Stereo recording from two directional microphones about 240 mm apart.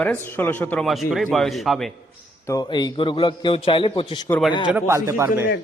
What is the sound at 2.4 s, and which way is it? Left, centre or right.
A man's voice, centre.